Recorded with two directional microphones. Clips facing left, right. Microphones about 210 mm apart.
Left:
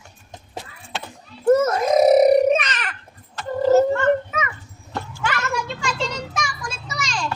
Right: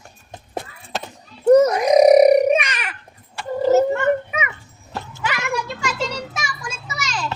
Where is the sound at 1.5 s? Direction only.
15° right (ahead or behind).